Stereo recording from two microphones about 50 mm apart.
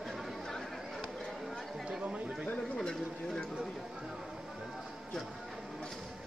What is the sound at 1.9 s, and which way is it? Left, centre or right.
Chatter, right.